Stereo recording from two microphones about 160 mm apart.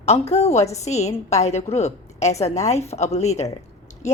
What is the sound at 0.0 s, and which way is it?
A woman's voice, 45° left (ahead or behind).